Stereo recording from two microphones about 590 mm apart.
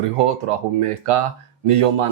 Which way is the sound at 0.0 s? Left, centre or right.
Right.